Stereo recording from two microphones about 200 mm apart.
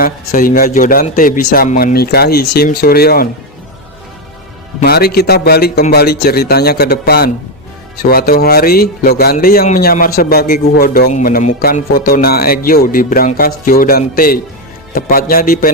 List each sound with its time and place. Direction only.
0.0 s speech: 45° left (ahead or behind)
4.8 s speech: 50° left (ahead or behind)